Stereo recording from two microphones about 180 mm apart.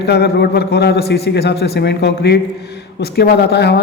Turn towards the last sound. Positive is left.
turn(degrees=65)  # may be behind; listen again after turning